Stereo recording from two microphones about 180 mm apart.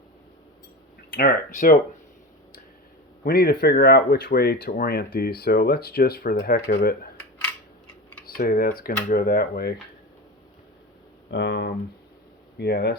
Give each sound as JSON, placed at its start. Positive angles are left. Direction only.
{"t": 1.1, "sound": "speech", "side_deg": 55}
{"t": 3.2, "sound": "speech", "side_deg": 60}
{"t": 8.4, "sound": "speech", "side_deg": 55}
{"t": 11.3, "sound": "speech", "side_deg": 75}
{"t": 12.5, "sound": "speech", "side_deg": 65}